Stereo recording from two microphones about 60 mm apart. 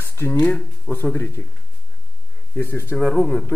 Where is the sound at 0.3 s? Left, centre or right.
Centre.